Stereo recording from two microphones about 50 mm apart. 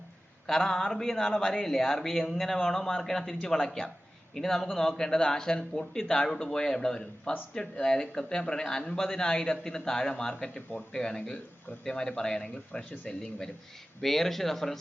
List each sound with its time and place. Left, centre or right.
0.4 s speech: centre
14.0 s speech: centre